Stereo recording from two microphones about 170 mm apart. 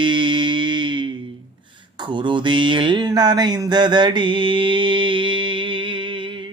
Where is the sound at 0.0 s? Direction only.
30° right (ahead or behind).